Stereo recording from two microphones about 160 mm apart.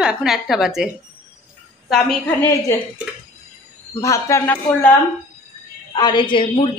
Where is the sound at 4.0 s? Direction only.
20° left (ahead or behind).